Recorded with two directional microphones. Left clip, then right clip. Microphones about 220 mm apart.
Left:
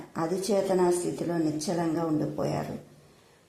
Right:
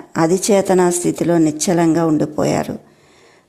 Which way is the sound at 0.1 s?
35° right (ahead or behind).